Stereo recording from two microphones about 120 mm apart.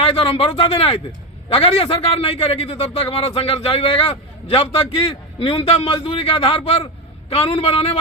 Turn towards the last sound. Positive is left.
turn(degrees=55)  # may be behind; listen again after turning